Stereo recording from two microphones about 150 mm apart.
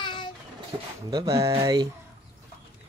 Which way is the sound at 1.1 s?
20° right (ahead or behind).